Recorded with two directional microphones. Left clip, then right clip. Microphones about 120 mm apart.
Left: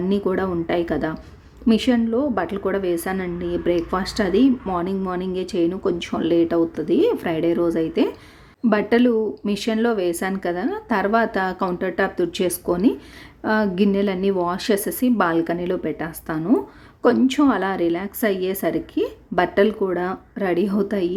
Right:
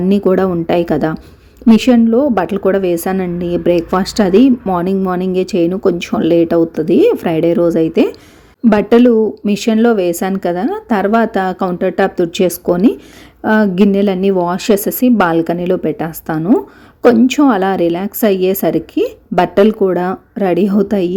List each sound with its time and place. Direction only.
0.1 s a woman's voice: 40° right (ahead or behind)